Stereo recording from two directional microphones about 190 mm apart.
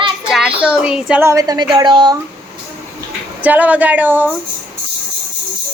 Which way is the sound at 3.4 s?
10° right (ahead or behind).